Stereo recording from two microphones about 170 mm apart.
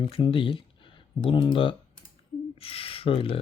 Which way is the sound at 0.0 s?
35° left (ahead or behind).